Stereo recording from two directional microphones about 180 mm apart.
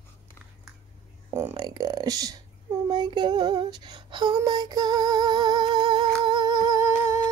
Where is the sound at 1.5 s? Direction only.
20° right (ahead or behind).